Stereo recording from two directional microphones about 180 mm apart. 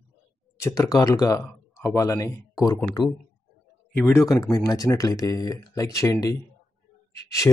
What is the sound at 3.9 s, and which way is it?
Speech, 10° left (ahead or behind).